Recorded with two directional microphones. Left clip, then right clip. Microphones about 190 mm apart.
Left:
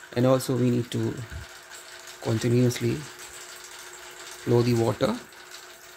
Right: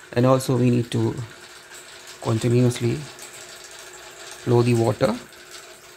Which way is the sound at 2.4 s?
15° left (ahead or behind).